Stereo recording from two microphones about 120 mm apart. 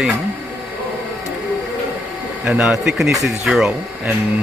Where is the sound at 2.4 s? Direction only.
5° right (ahead or behind).